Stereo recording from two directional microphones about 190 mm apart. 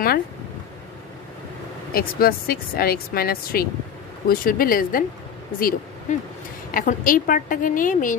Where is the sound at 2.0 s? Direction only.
50° left (ahead or behind).